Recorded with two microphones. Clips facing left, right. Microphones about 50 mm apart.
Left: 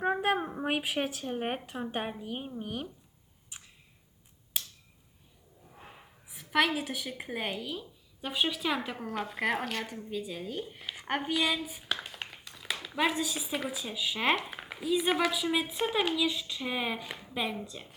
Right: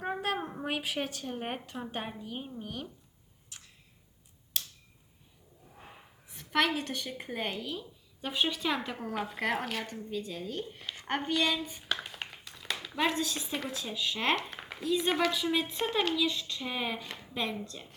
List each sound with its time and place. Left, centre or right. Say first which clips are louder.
0.0 s speech: left 5 dB; centre
3.5 s a sound: left 2 dB; centre
4.5 s finger snapping: even; centre
6.2 s a woman's voice: left 1 dB; centre